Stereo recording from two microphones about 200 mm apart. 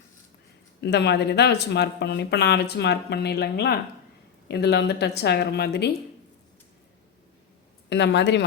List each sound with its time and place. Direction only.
0.8 s speech: 60° left (ahead or behind)
7.9 s speech: 60° left (ahead or behind)